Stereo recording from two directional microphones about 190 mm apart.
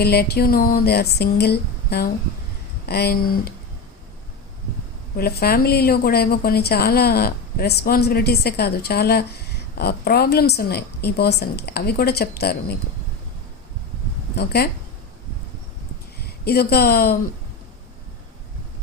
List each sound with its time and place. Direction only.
0.0 s a woman's voice: 55° left (ahead or behind)
5.1 s a woman's voice: 55° left (ahead or behind)
14.3 s a woman's voice: 55° left (ahead or behind)
16.2 s speech: 55° left (ahead or behind)